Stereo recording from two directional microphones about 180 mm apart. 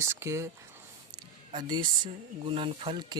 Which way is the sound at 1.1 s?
25° right (ahead or behind).